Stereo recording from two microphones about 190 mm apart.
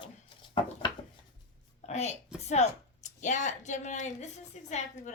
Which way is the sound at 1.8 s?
35° left (ahead or behind).